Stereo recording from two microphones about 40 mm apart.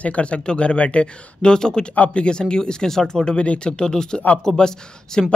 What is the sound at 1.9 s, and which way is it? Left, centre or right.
Speech, left.